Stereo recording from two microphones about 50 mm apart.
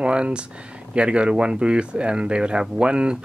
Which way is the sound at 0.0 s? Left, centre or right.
Right.